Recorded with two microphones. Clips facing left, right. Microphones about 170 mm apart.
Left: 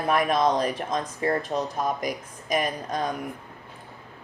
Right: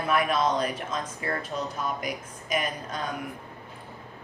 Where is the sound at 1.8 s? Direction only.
40° left (ahead or behind).